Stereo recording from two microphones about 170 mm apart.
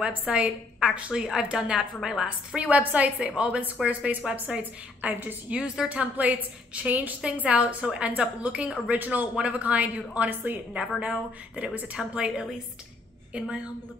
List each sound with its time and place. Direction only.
0.0 s a woman's voice: 5° right (ahead or behind)